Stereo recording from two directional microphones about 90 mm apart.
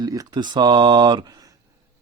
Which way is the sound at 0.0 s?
50° right (ahead or behind).